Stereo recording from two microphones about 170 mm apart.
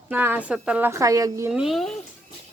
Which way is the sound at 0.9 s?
20° right (ahead or behind).